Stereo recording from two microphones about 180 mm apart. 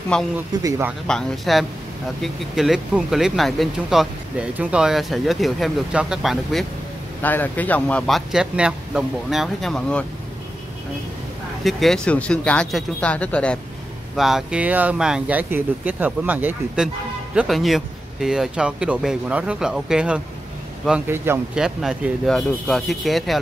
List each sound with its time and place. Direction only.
0.1 s speech: 5° left (ahead or behind)
0.6 s speech: 15° right (ahead or behind)
1.0 s speech: centre (ahead or behind)
7.2 s speech: 10° left (ahead or behind)
11.6 s speech: centre (ahead or behind)